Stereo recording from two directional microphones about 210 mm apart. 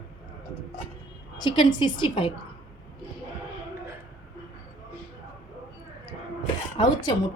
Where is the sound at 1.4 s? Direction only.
20° left (ahead or behind).